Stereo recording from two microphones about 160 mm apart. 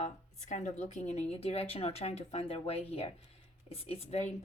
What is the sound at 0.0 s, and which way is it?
Speech, 45° left (ahead or behind).